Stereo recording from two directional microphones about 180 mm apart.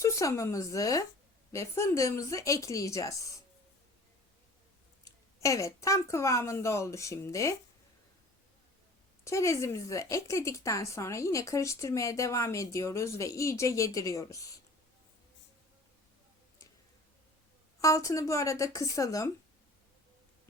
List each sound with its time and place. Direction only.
0.0 s a woman's voice: 15° left (ahead or behind)
5.0 s a woman's voice: 15° left (ahead or behind)
9.2 s a woman's voice: 15° left (ahead or behind)
17.7 s a woman's voice: 15° left (ahead or behind)